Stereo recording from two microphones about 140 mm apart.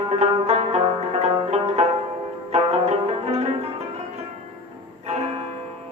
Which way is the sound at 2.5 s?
50° right (ahead or behind).